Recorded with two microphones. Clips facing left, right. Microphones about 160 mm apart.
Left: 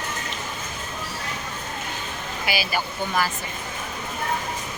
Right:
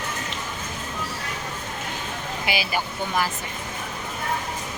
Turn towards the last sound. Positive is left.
turn(degrees=-20)  # may be behind; listen again after turning